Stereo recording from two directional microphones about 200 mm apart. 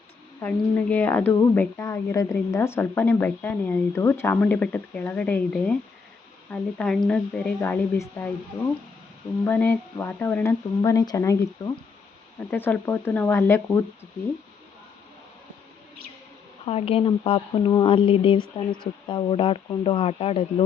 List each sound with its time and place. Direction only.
0.4 s a woman's voice: 10° left (ahead or behind)
9.4 s a woman's voice: 10° left (ahead or behind)
16.6 s speech: 30° left (ahead or behind)